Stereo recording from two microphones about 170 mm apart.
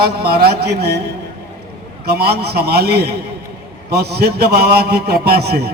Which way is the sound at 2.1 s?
70° right (ahead or behind).